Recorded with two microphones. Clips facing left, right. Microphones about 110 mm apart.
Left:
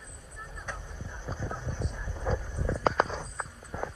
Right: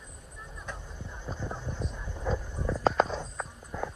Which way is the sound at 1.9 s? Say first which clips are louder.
Even; centre (ahead or behind).